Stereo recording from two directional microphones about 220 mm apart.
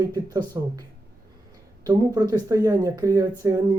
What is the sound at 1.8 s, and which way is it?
Speech, 15° right (ahead or behind).